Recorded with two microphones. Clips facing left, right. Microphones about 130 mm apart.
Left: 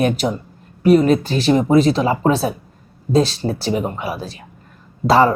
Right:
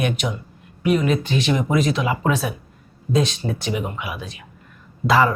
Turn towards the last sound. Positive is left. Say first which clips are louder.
# left 4 dB
turn(degrees=35)  # may be behind; listen again after turning